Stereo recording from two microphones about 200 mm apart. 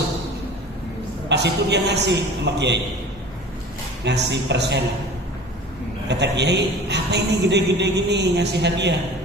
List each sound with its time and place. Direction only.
1.3 s a man's voice: 60° right (ahead or behind)
4.0 s a man's voice: 60° right (ahead or behind)
6.1 s a man's voice: 60° right (ahead or behind)